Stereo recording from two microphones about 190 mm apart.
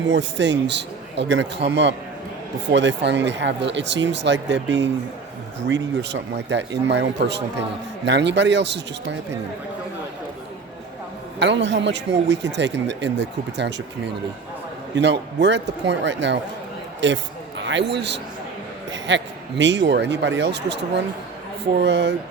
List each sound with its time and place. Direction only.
0.1 s a man's voice: 70° right (ahead or behind)
11.3 s a man's voice: 70° right (ahead or behind)